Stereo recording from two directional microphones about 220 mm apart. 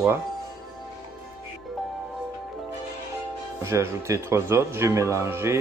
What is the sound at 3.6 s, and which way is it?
Speech, 15° right (ahead or behind).